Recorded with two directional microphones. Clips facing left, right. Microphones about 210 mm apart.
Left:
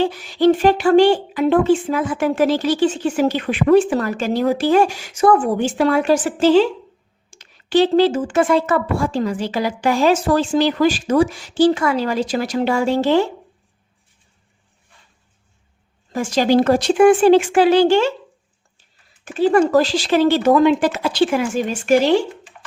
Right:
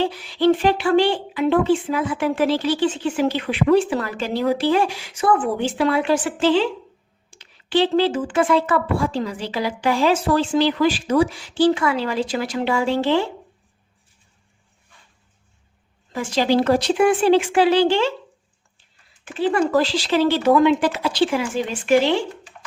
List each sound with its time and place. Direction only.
0.0 s speech: 45° left (ahead or behind)
16.1 s speech: 45° left (ahead or behind)
19.2 s speech: 45° left (ahead or behind)